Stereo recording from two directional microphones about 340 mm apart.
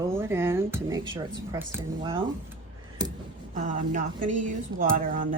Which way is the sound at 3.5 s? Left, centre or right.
Right.